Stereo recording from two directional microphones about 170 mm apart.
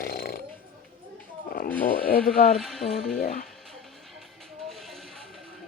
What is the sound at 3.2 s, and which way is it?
Speech, 50° left (ahead or behind).